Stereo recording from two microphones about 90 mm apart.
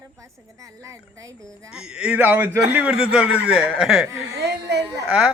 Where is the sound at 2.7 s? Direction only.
10° right (ahead or behind).